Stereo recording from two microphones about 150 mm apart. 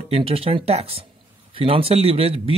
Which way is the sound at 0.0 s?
40° right (ahead or behind).